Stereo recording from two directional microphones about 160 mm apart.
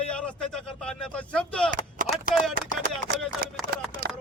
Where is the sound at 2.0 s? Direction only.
55° right (ahead or behind).